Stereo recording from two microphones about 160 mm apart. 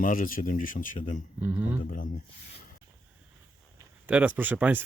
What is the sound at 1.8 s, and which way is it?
Speech, 55° left (ahead or behind).